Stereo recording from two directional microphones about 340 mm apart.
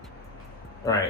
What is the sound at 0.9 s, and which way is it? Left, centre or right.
Speech, centre.